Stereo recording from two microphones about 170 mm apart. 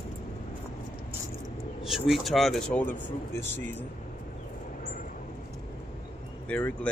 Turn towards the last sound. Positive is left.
turn(degrees=10)  # may be behind; listen again after turning